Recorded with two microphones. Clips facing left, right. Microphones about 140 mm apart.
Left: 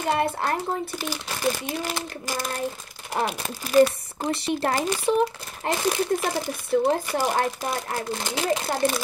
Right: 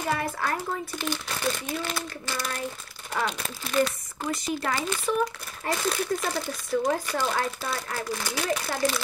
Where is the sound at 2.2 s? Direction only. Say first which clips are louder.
Left 5 dB; 40° left (ahead or behind).